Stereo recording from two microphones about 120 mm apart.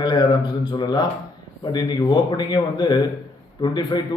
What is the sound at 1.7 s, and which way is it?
Speech, 35° left (ahead or behind).